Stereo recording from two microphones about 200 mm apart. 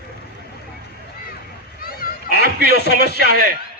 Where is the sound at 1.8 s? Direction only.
50° left (ahead or behind).